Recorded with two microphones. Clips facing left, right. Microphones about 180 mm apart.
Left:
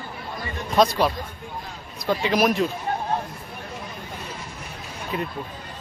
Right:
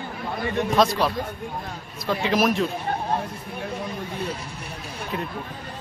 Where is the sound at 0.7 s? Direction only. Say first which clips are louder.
Left 3 dB; centre (ahead or behind).